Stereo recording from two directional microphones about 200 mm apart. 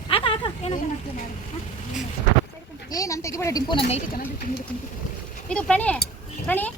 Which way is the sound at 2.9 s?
15° left (ahead or behind).